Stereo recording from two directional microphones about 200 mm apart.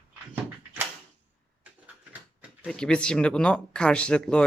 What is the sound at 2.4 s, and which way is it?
Speech, centre (ahead or behind).